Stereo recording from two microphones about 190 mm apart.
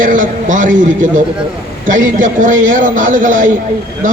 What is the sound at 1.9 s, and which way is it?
A man's voice, 45° right (ahead or behind).